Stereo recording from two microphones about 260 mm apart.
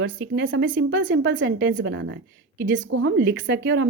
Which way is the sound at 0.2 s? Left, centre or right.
Right.